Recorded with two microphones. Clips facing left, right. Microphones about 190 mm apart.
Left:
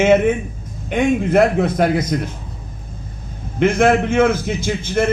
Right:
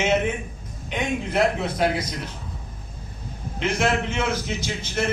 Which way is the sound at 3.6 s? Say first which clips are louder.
Left 9 dB; 50° left (ahead or behind).